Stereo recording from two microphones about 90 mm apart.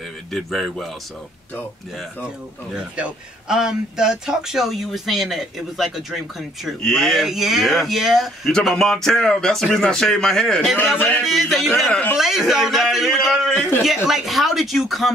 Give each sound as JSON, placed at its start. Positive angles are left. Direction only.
{"t": 0.3, "sound": "a man's voice", "side_deg": 0}
{"t": 2.2, "sound": "a man's voice", "side_deg": -10}
{"t": 11.0, "sound": "music", "side_deg": 15}
{"t": 11.2, "sound": "a man's voice", "side_deg": 0}
{"t": 13.8, "sound": "a man's voice", "side_deg": -5}